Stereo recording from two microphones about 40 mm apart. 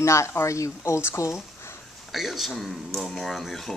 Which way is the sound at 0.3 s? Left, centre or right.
Left.